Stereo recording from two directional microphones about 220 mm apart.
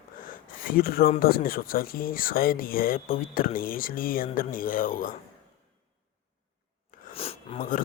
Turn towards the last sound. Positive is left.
turn(degrees=25)  # may be behind; listen again after turning